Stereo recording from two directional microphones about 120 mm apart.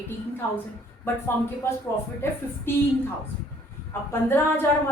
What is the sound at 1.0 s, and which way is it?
Speech, 20° left (ahead or behind).